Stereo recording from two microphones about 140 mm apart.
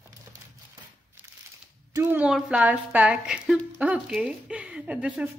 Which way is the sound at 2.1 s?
10° right (ahead or behind).